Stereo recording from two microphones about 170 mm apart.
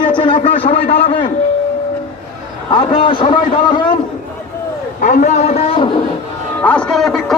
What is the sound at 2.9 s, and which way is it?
A man's voice, 30° left (ahead or behind).